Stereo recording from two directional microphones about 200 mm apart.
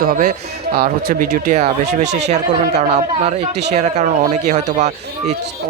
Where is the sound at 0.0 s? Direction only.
45° right (ahead or behind).